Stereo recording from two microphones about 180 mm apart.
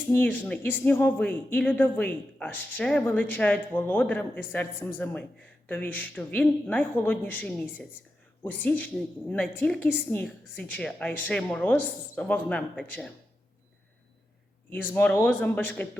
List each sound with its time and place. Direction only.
0.1 s speech: 10° left (ahead or behind)
7.7 s a woman's voice: 5° right (ahead or behind)
8.4 s speech: 10° left (ahead or behind)
14.9 s speech: 10° left (ahead or behind)